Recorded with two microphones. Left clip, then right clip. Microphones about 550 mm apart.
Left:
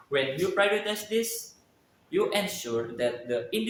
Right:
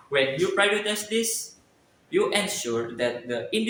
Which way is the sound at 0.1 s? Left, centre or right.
Left.